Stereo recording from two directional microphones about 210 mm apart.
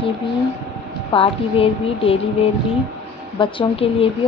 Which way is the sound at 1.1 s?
25° left (ahead or behind).